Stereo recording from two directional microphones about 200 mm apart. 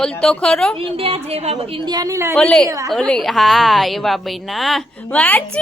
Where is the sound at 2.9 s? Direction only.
5° left (ahead or behind).